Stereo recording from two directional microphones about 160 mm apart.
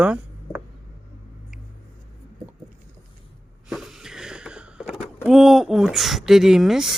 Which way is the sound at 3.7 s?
5° right (ahead or behind).